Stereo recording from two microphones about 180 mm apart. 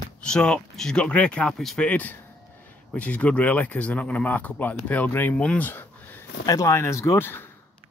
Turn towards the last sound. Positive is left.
turn(degrees=10)  # may be behind; listen again after turning